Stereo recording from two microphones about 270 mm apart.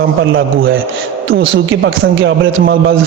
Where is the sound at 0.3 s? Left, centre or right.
Right.